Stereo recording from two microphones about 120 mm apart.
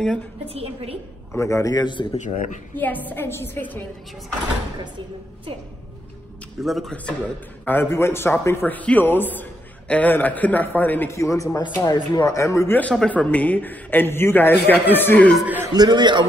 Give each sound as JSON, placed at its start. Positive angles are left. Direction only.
{"t": 0.5, "sound": "a woman's voice", "side_deg": -55}
{"t": 1.3, "sound": "speech", "side_deg": 25}
{"t": 2.1, "sound": "speech", "side_deg": 90}
{"t": 2.7, "sound": "a man's voice", "side_deg": 15}
{"t": 6.6, "sound": "a man's voice", "side_deg": 0}
{"t": 15.4, "sound": "a man's voice", "side_deg": -15}
{"t": 15.7, "sound": "a man's voice", "side_deg": -35}